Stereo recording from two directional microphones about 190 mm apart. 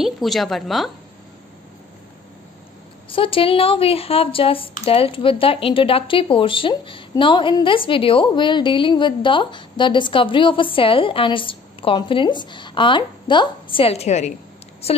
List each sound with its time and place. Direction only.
0.0 s a woman's voice: centre (ahead or behind)
3.1 s speech: 30° left (ahead or behind)